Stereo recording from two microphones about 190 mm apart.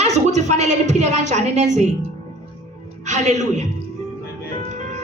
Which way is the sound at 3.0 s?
40° right (ahead or behind).